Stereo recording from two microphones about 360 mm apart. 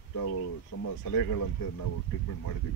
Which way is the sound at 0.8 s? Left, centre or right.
Left.